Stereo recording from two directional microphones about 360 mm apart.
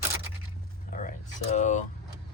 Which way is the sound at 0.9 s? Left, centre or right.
Left.